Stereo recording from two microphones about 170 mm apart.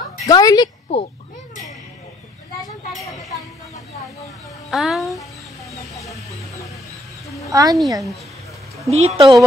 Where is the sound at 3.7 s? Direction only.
40° left (ahead or behind).